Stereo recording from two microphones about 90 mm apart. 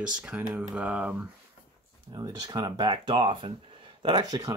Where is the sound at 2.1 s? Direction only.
50° right (ahead or behind).